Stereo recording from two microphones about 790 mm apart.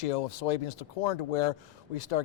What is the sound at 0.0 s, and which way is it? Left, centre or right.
Speech, left.